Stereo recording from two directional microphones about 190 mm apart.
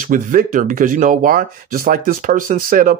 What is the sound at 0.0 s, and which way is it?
Speech, 45° right (ahead or behind).